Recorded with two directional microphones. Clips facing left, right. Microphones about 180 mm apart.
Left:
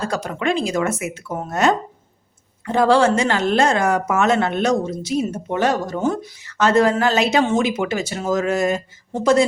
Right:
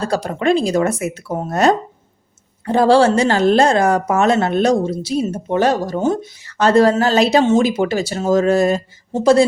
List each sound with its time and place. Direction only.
0.0 s a woman's voice: 35° right (ahead or behind)